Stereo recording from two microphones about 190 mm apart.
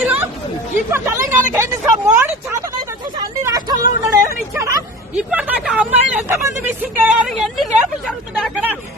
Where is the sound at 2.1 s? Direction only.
10° right (ahead or behind).